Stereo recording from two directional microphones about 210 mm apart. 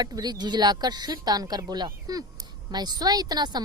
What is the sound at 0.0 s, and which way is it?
Speech, 20° right (ahead or behind).